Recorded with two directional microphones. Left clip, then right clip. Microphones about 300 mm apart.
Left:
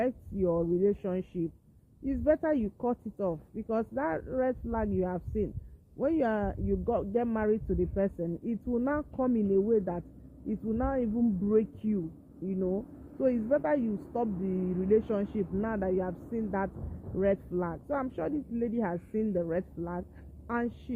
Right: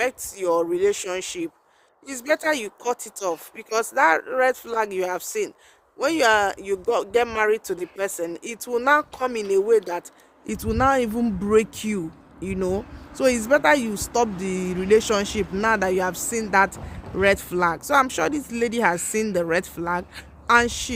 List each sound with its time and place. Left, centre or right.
0.0 s speech: centre